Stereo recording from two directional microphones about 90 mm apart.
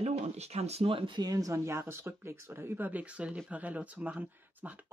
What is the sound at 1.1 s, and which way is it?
Speech, 45° right (ahead or behind).